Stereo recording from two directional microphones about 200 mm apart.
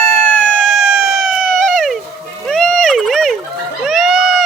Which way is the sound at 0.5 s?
Centre (ahead or behind).